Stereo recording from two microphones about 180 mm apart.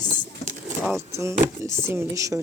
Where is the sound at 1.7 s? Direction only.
15° right (ahead or behind).